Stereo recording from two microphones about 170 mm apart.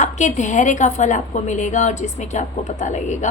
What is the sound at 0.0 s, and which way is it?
A woman's voice, 45° left (ahead or behind).